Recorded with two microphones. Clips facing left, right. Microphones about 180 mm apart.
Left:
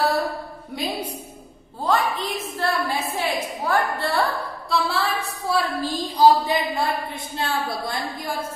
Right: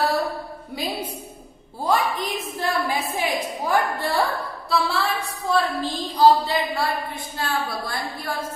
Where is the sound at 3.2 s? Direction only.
10° right (ahead or behind).